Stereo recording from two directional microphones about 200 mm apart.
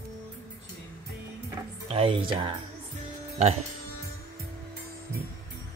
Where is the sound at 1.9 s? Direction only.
30° right (ahead or behind).